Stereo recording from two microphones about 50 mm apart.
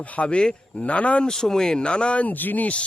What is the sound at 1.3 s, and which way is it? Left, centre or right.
A man's voice, centre.